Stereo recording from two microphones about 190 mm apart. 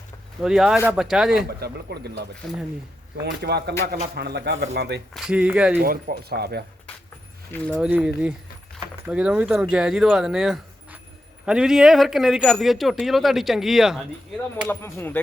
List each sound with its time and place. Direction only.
0.4 s speech: 5° right (ahead or behind)
1.5 s speech: 55° right (ahead or behind)
5.1 s speech: 5° right (ahead or behind)
5.8 s speech: 50° right (ahead or behind)
7.8 s speech: 5° right (ahead or behind)
14.7 s speech: 15° left (ahead or behind)